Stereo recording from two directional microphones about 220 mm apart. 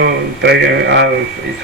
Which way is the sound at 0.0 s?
50° right (ahead or behind).